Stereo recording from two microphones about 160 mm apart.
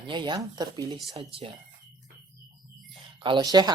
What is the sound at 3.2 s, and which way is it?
Speech, 30° right (ahead or behind).